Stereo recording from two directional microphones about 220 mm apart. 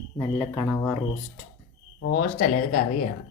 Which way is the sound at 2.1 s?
40° left (ahead or behind).